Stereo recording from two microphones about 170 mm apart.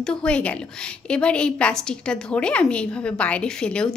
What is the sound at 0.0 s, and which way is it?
Speech, 5° left (ahead or behind).